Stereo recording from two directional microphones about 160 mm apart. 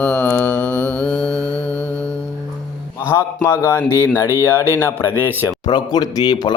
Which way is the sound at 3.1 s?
15° left (ahead or behind).